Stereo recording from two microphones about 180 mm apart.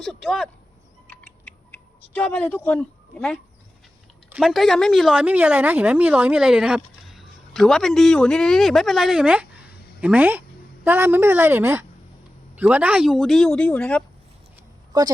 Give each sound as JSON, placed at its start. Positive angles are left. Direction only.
{"t": 0.0, "sound": "speech", "side_deg": 0}
{"t": 1.0, "sound": "a sound", "side_deg": 10}
{"t": 2.6, "sound": "a woman's voice", "side_deg": 5}
{"t": 14.9, "sound": "a woman's voice", "side_deg": -20}